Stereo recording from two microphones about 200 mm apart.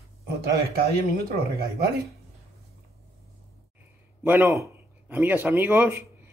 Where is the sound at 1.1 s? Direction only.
50° right (ahead or behind).